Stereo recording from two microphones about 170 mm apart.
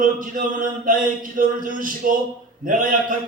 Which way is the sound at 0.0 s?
50° right (ahead or behind).